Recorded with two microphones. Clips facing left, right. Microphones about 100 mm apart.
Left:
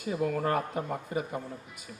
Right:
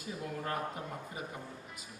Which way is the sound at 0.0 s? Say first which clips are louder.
Left 10 dB; 70° left (ahead or behind).